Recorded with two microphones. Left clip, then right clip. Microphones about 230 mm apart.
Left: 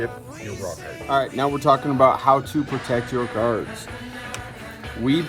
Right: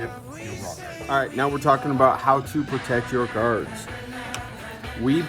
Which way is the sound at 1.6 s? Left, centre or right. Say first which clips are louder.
Left 2 dB; left.